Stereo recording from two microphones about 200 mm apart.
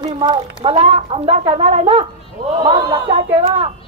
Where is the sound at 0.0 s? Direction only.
25° right (ahead or behind).